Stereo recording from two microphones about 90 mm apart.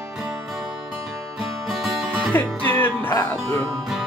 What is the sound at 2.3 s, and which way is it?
Music, 20° left (ahead or behind).